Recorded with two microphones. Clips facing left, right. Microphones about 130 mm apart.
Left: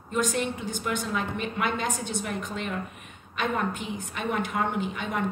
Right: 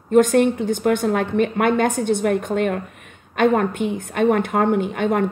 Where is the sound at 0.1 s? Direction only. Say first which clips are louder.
Right 13 dB; 55° right (ahead or behind).